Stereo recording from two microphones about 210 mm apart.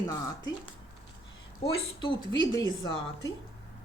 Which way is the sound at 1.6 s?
25° left (ahead or behind).